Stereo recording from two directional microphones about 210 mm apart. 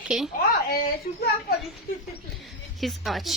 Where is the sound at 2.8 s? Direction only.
Centre (ahead or behind).